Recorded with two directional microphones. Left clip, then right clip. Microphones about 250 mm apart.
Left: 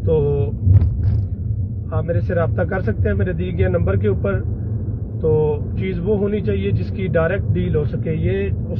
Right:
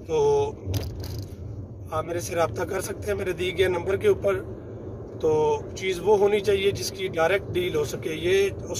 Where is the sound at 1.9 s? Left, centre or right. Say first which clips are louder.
Left 5 dB; right.